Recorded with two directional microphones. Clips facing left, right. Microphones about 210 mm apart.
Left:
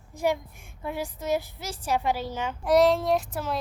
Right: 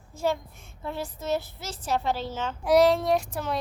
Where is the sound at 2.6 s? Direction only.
Centre (ahead or behind).